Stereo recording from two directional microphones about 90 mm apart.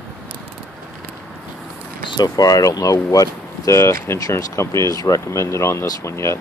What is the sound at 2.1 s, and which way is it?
Speech, 50° left (ahead or behind).